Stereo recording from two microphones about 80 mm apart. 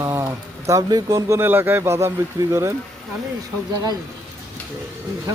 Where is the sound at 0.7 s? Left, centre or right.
Right.